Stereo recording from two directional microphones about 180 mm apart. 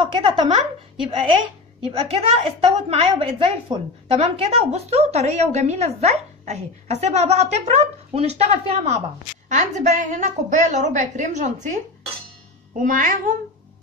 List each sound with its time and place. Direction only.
0.0 s a woman's voice: 30° right (ahead or behind)
1.9 s a woman's voice: 35° right (ahead or behind); by 13.3 s 50° right (ahead or behind)